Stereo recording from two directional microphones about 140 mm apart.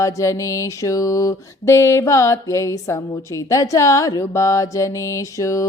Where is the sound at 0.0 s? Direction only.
20° left (ahead or behind).